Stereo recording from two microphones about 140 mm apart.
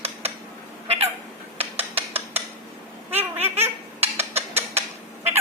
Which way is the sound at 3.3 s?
50° right (ahead or behind).